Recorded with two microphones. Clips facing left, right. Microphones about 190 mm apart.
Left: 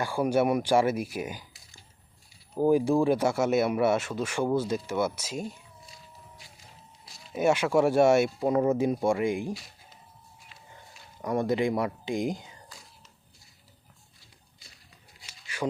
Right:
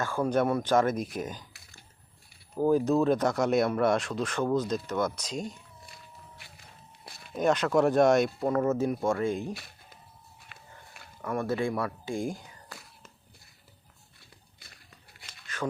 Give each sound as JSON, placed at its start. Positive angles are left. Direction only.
{"t": 0.0, "sound": "speech", "side_deg": 10}
{"t": 1.5, "sound": "typing", "side_deg": -60}
{"t": 2.6, "sound": "speech", "side_deg": 15}
{"t": 5.8, "sound": "a sound", "side_deg": -60}
{"t": 7.3, "sound": "speech", "side_deg": 10}
{"t": 10.5, "sound": "a sound", "side_deg": -60}
{"t": 11.2, "sound": "speech", "side_deg": 15}
{"t": 12.6, "sound": "whispering", "side_deg": -65}
{"t": 14.2, "sound": "a sound", "side_deg": -60}